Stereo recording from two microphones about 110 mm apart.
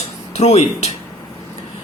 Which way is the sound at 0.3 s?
80° left.